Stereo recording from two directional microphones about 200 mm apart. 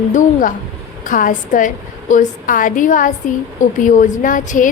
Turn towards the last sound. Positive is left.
turn(degrees=40)  # may be behind; listen again after turning